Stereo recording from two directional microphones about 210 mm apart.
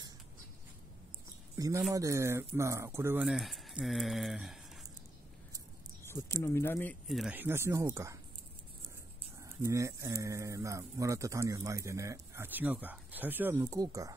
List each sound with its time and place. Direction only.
1.6 s speech: 15° right (ahead or behind)
6.0 s a sound: 15° left (ahead or behind)
6.4 s speech: 10° left (ahead or behind); by 8.2 s 15° right (ahead or behind)
9.4 s speech: 15° right (ahead or behind)